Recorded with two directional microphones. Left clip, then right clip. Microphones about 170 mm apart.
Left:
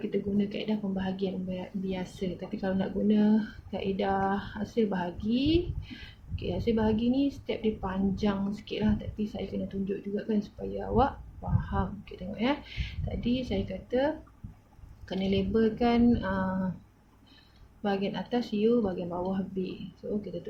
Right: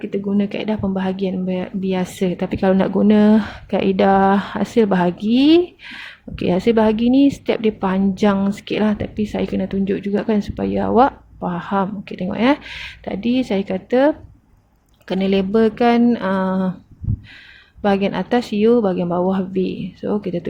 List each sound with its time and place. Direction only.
0.1 s speech: 55° right (ahead or behind)
17.8 s speech: 60° right (ahead or behind)